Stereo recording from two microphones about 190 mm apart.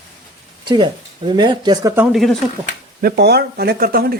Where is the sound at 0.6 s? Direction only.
25° right (ahead or behind); by 2.3 s centre (ahead or behind).